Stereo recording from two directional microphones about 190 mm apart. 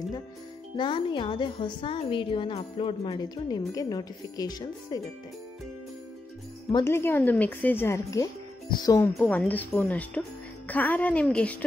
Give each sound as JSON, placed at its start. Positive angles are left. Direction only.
{"t": 0.7, "sound": "speech", "side_deg": 25}
{"t": 6.7, "sound": "speech", "side_deg": 15}
{"t": 9.1, "sound": "speech", "side_deg": 5}